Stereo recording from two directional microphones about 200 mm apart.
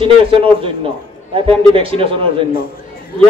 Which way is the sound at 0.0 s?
25° right (ahead or behind).